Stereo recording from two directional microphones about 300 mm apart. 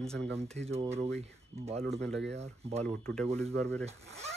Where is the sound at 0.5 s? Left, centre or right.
Right.